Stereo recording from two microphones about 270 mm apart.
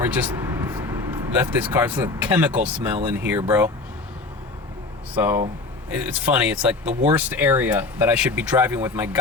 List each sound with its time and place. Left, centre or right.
0.0 s vehicle: centre
1.4 s speech: centre
5.1 s speech: centre